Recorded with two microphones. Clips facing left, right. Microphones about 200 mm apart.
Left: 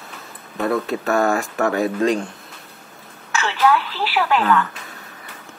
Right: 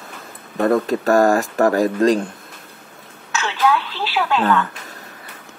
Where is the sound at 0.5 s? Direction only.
45° right (ahead or behind).